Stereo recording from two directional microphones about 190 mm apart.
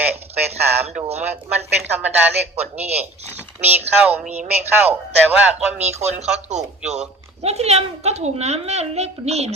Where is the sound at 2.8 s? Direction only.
35° right (ahead or behind).